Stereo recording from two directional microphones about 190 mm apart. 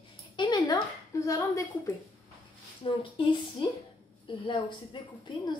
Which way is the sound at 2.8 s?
25° left (ahead or behind).